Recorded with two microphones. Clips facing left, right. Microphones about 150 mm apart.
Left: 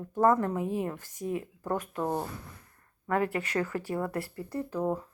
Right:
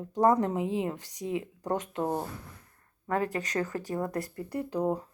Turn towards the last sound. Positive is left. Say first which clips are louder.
# right 1 dB
turn(degrees=-15)  # may be behind; listen again after turning